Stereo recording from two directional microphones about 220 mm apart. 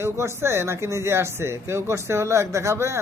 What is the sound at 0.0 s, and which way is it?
A man's voice, 10° right (ahead or behind).